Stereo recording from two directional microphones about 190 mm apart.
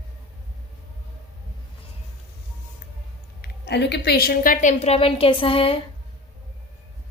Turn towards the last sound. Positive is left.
turn(degrees=30)  # may be behind; listen again after turning